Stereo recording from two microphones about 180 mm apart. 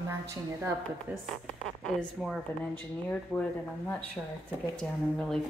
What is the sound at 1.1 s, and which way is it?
Speech, 5° left (ahead or behind).